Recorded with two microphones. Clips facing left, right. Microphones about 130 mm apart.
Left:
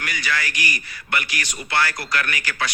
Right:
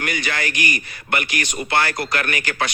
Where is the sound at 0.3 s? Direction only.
55° right (ahead or behind).